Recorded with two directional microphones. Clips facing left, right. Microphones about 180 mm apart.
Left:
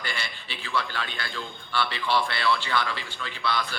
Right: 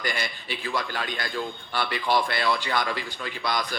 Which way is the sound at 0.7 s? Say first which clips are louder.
Even; 40° right (ahead or behind).